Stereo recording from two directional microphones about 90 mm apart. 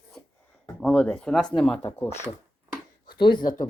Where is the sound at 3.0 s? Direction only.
60° left (ahead or behind).